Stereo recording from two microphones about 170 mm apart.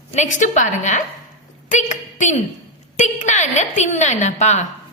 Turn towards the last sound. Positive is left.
turn(degrees=40)  # may be behind; listen again after turning